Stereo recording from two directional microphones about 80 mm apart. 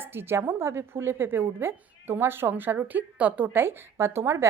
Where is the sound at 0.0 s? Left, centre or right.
Right.